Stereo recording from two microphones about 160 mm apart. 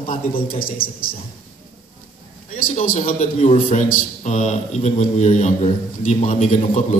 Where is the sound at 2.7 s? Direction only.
40° left (ahead or behind).